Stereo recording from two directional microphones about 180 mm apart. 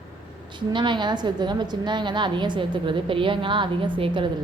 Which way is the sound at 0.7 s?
25° right (ahead or behind).